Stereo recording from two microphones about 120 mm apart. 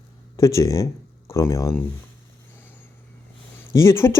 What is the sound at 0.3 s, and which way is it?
Speech, 25° left (ahead or behind).